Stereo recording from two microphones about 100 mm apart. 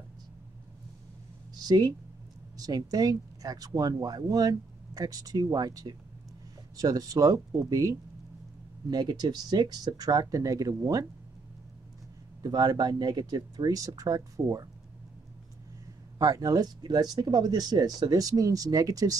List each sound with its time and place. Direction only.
1.5 s speech: 45° right (ahead or behind)
12.4 s speech: 40° right (ahead or behind)
16.2 s speech: 35° right (ahead or behind)